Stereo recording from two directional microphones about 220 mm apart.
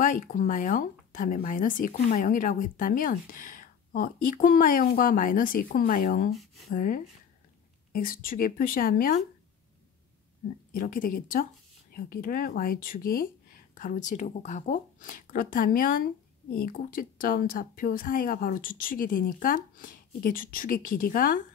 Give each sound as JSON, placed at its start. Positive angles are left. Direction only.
{"t": 0.0, "sound": "speech", "side_deg": 35}
{"t": 10.7, "sound": "speech", "side_deg": 40}